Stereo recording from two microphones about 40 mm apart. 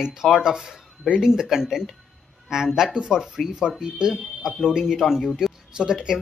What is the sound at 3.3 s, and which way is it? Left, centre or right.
Speech, centre.